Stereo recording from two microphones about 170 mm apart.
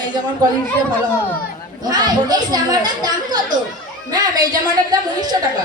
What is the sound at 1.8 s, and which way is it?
A child's voice, 25° right (ahead or behind).